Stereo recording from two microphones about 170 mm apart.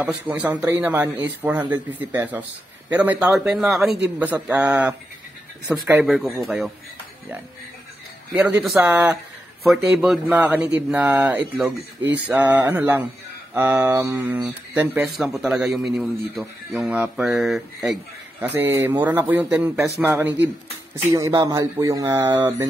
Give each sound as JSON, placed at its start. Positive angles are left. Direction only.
{"t": 0.0, "sound": "speech", "side_deg": -10}
{"t": 6.0, "sound": "speech", "side_deg": 0}
{"t": 8.3, "sound": "speech", "side_deg": -10}